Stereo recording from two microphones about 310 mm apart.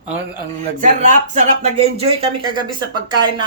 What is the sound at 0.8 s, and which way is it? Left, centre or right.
Speech, right.